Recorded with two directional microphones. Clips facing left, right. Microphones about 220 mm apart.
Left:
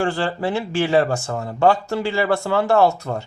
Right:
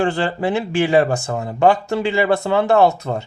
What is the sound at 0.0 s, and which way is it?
Speech, 20° right (ahead or behind).